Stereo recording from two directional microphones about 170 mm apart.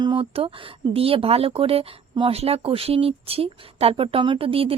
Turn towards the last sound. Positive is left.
turn(degrees=-35)  # may be behind; listen again after turning